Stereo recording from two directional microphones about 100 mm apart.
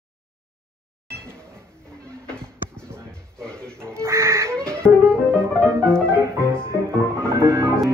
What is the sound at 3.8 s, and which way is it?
Goose, 25° right (ahead or behind).